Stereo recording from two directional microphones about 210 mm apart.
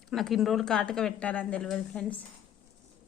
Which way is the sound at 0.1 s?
Centre (ahead or behind).